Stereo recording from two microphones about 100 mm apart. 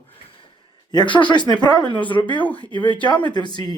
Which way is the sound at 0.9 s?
55° left (ahead or behind).